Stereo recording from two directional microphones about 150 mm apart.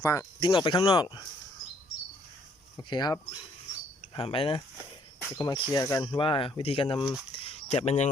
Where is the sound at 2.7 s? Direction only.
30° left (ahead or behind).